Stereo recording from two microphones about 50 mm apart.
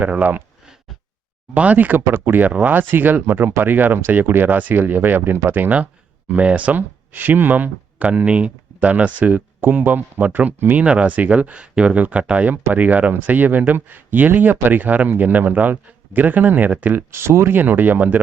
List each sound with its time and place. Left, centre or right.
0.0 s speech: right
1.5 s speech: right
2.0 s speech: right
2.5 s speech: right
2.7 s speech: right
9.6 s speech: right
17.1 s speech: right
17.5 s speech: right